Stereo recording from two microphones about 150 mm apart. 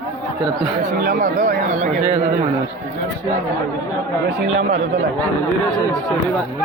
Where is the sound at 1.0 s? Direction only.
70° right (ahead or behind); by 2.0 s 55° right (ahead or behind).